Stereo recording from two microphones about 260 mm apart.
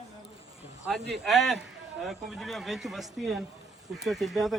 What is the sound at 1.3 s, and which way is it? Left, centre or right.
Speech, centre.